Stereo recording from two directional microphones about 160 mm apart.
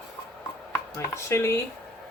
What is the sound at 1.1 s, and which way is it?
Speech, 15° left (ahead or behind).